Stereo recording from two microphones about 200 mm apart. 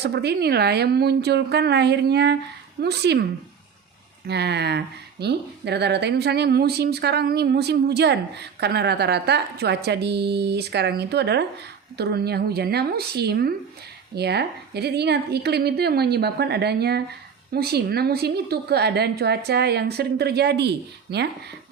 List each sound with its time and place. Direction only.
0.0 s speech: 55° right (ahead or behind)
4.3 s a woman's voice: 55° right (ahead or behind)